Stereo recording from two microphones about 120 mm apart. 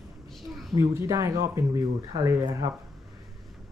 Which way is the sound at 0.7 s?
25° right (ahead or behind).